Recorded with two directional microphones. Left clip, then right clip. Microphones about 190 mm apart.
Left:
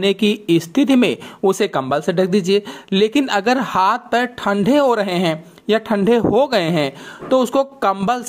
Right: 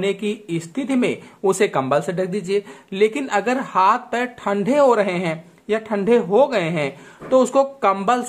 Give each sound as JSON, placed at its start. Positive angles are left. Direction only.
{"t": 0.0, "sound": "speech", "side_deg": 35}